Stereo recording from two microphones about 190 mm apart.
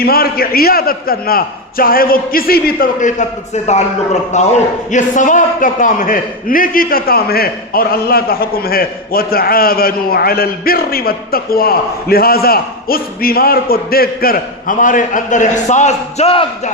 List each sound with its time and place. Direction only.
0.0 s a man's voice: 50° left (ahead or behind); by 16.7 s 30° left (ahead or behind)